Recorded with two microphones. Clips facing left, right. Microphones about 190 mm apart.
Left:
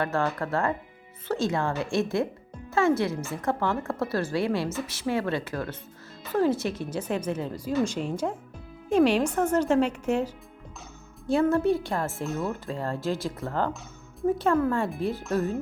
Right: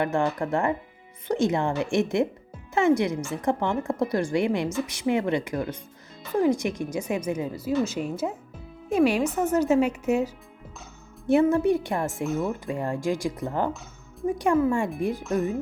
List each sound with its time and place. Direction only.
0.0 s a woman's voice: 15° right (ahead or behind)
11.5 s speech: 15° right (ahead or behind)
12.1 s speech: centre (ahead or behind)
12.5 s speech: 15° right (ahead or behind)